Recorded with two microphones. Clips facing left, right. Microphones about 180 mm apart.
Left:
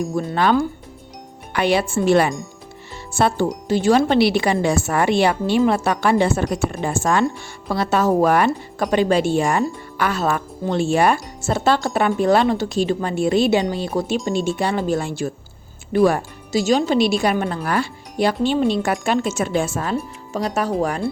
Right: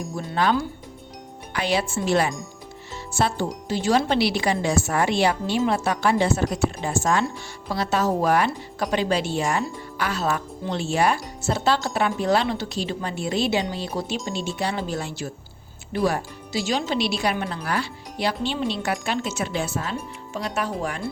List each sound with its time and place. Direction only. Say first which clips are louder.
0.3 s speech: left 4 dB; 60° left (ahead or behind); by 21.1 s 40° left (ahead or behind)